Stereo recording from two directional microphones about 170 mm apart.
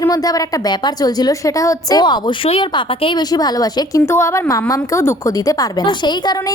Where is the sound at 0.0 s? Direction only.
20° left (ahead or behind).